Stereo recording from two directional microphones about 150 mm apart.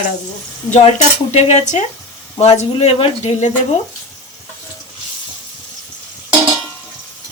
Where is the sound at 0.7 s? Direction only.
50° left (ahead or behind).